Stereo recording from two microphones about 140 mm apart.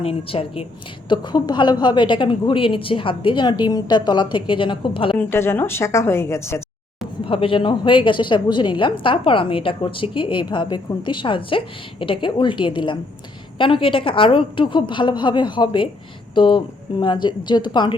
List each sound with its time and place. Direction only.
0.0 s a woman's voice: 45° left (ahead or behind)
1.0 s a woman's voice: 30° left (ahead or behind)
5.1 s a woman's voice: 15° left (ahead or behind)
7.3 s a woman's voice: 40° left (ahead or behind)